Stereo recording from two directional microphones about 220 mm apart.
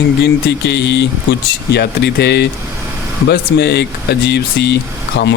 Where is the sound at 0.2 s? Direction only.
50° left (ahead or behind).